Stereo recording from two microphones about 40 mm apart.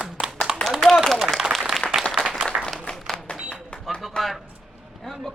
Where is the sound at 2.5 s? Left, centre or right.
Right.